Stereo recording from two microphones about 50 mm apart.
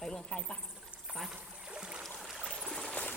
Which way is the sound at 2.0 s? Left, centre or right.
Centre.